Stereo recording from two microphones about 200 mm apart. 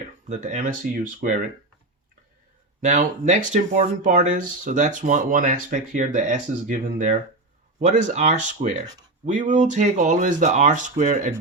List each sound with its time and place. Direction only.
0.3 s speech: 40° right (ahead or behind)
2.8 s speech: 35° right (ahead or behind)
7.8 s speech: 35° right (ahead or behind)